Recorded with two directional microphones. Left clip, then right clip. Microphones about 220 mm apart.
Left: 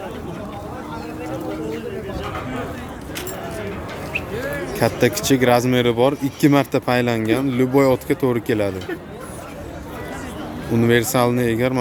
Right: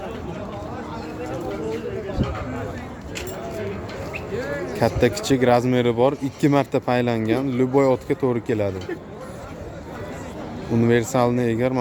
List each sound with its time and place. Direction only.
4.8 s speech: 5° right (ahead or behind)
10.8 s speech: 5° right (ahead or behind)